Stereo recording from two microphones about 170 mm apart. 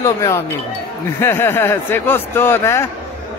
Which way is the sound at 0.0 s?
15° left (ahead or behind).